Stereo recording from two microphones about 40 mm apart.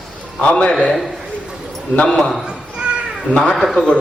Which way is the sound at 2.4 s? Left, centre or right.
Right.